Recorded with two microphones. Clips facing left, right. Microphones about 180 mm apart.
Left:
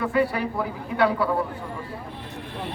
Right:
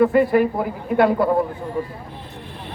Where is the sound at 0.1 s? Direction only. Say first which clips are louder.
Right 7 dB; 50° right (ahead or behind).